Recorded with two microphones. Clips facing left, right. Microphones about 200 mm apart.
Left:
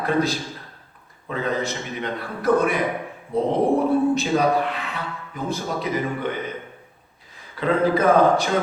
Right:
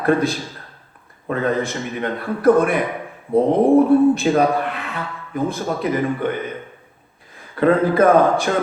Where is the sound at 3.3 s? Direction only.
55° right (ahead or behind).